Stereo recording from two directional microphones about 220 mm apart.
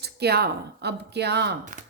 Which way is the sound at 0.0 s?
45° right (ahead or behind).